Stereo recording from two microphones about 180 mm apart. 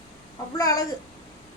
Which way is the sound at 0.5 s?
20° left (ahead or behind).